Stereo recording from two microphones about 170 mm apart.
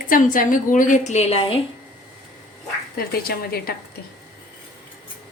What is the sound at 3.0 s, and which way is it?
Speech, 65° left (ahead or behind).